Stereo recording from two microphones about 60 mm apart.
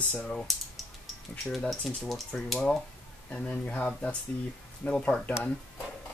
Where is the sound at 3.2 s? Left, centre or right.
Left.